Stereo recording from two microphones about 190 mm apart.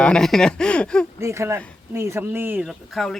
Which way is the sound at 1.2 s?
15° right (ahead or behind).